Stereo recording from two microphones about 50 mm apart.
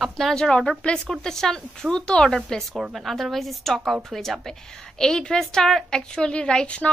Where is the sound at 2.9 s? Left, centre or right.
Centre.